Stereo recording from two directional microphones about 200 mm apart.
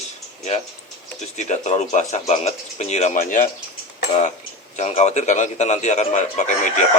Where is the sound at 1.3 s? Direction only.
35° left (ahead or behind).